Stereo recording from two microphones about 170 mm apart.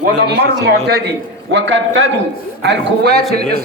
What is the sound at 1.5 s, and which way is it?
A man's voice, 90° right.